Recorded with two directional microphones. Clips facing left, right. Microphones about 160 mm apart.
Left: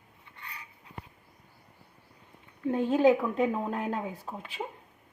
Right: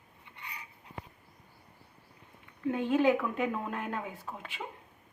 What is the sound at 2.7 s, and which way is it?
A woman's voice, 35° left (ahead or behind).